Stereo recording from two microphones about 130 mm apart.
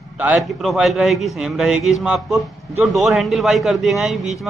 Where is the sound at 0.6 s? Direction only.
Centre (ahead or behind).